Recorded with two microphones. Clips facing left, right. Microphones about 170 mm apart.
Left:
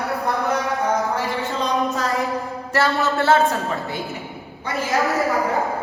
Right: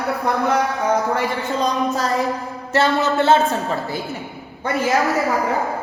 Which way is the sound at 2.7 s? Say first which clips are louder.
Right 3 dB; 20° right (ahead or behind).